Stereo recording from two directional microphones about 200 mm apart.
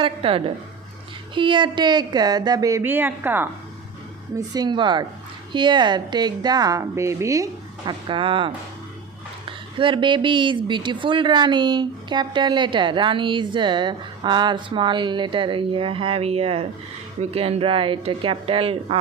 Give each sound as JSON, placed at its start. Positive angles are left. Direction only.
{"t": 0.0, "sound": "speech", "side_deg": -25}